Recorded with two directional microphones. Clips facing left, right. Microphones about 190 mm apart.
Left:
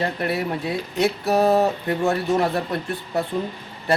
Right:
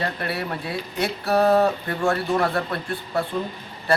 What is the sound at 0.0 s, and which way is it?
Speech, 20° left (ahead or behind).